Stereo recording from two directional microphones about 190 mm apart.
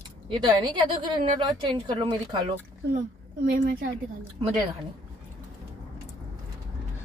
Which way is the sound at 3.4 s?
55° right (ahead or behind).